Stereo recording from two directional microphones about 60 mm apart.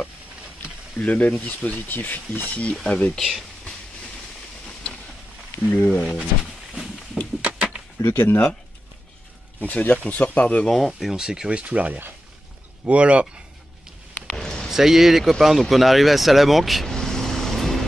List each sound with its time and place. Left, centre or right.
0.9 s speech: left
3.1 s speech: centre
5.7 s speech: centre
7.4 s a sound: centre
8.0 s speech: left
9.6 s speech: left
10.9 s speech: centre
14.2 s a sound: centre
14.7 s speech: centre